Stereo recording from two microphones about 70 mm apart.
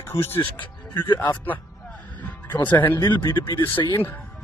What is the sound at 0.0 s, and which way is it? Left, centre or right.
Speech, left.